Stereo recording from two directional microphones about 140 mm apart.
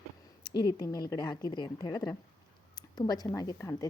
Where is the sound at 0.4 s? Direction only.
30° left (ahead or behind).